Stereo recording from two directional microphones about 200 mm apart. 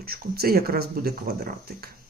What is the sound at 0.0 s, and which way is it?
Speech, 50° right (ahead or behind).